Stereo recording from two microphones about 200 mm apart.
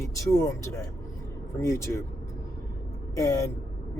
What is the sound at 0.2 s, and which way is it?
Speech, 15° left (ahead or behind).